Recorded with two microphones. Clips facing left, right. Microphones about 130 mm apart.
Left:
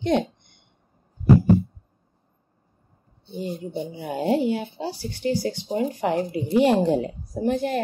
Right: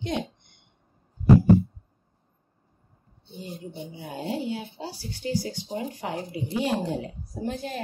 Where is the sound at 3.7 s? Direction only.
75° left (ahead or behind).